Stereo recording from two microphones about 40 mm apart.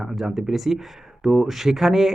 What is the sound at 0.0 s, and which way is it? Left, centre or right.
Speech, centre.